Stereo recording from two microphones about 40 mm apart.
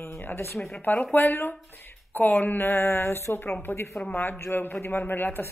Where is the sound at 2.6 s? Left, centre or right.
Left.